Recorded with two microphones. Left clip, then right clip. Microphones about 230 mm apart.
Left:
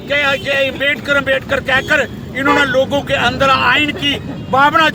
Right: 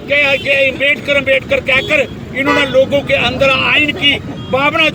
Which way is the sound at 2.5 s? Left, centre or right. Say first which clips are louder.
Right 1 dB; centre.